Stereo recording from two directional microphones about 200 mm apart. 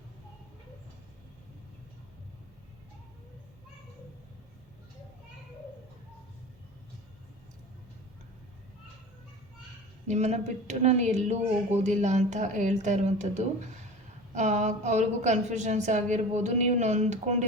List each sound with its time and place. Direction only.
10.1 s speech: 35° right (ahead or behind)